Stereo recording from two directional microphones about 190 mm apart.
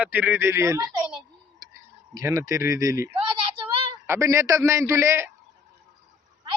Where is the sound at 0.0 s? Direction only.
10° right (ahead or behind).